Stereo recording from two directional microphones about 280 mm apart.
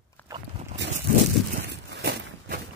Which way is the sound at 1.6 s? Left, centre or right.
Right.